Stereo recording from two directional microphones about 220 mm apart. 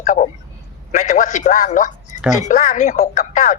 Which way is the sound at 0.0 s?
35° left (ahead or behind).